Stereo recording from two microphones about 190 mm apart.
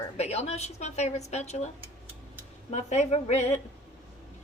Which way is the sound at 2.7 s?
35° left (ahead or behind).